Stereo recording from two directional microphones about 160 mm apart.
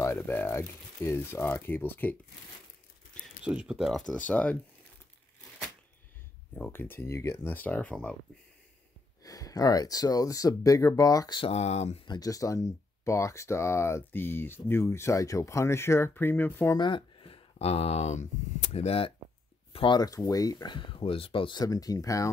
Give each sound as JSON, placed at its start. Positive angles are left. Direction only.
{"t": 0.0, "sound": "speech", "side_deg": 15}
{"t": 3.4, "sound": "speech", "side_deg": -5}
{"t": 6.5, "sound": "speech", "side_deg": 10}
{"t": 9.2, "sound": "speech", "side_deg": 20}
{"t": 12.1, "sound": "speech", "side_deg": 25}
{"t": 16.7, "sound": "speech", "side_deg": 30}